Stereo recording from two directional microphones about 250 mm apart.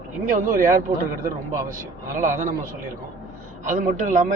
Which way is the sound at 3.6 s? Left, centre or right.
Right.